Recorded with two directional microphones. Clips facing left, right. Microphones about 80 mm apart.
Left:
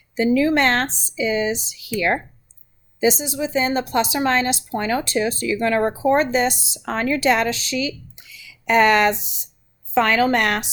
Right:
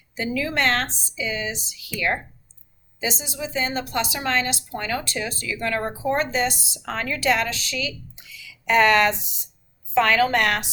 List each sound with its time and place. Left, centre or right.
0.2 s a woman's voice: left
3.0 s a woman's voice: left
8.4 s a sound: left
9.9 s a woman's voice: left